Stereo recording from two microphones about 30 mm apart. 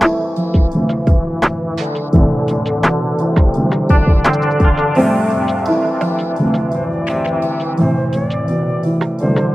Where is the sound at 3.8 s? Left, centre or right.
Left.